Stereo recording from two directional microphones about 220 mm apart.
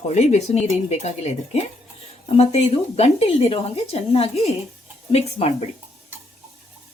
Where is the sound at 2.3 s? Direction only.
30° left (ahead or behind).